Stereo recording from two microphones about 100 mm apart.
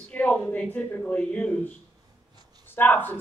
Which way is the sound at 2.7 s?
20° left (ahead or behind).